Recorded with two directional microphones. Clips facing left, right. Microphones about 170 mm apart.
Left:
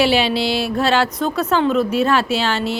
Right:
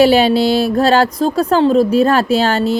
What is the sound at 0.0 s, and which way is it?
Speech, 40° right (ahead or behind).